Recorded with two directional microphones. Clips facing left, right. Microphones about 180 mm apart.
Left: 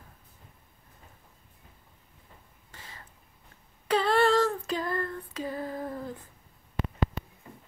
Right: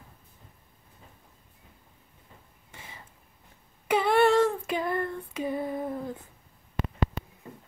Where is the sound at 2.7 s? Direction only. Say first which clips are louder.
Right 2 dB; 15° right (ahead or behind).